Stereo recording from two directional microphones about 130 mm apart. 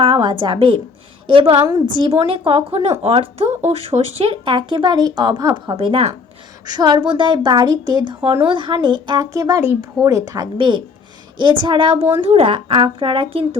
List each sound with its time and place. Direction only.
0.0 s a woman's voice: 40° right (ahead or behind)
6.7 s a woman's voice: 35° right (ahead or behind)